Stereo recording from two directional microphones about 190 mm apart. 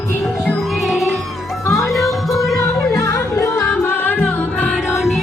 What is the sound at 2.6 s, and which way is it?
Music, 15° left (ahead or behind).